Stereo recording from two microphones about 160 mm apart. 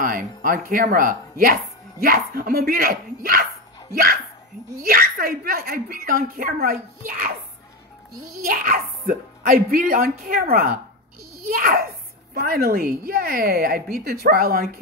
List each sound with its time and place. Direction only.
0.0 s a woman's voice: 55° right (ahead or behind)